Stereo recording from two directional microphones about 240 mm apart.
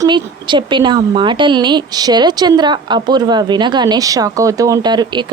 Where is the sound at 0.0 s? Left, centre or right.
Centre.